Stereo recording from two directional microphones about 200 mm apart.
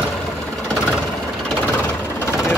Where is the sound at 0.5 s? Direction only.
5° left (ahead or behind).